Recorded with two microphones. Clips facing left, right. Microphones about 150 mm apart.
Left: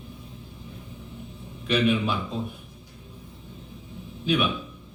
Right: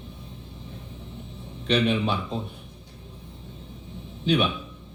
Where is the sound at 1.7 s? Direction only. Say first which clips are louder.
Even; 30° right (ahead or behind).